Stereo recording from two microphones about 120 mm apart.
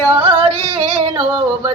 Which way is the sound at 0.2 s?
45° right (ahead or behind).